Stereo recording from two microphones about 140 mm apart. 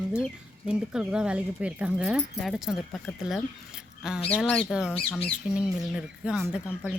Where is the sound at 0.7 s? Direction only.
5° right (ahead or behind).